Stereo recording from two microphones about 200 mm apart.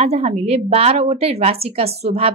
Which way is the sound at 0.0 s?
30° right (ahead or behind).